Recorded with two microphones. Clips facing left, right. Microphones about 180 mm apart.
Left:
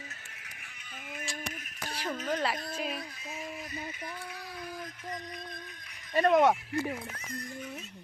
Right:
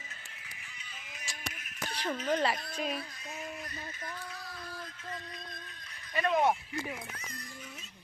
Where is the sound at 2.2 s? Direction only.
Centre (ahead or behind).